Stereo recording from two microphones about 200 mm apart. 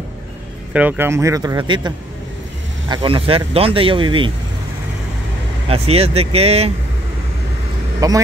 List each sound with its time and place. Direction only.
0.7 s speech: 10° right (ahead or behind); by 4.3 s 25° right (ahead or behind)
5.7 s speech: 30° right (ahead or behind)
8.0 s speech: 15° right (ahead or behind)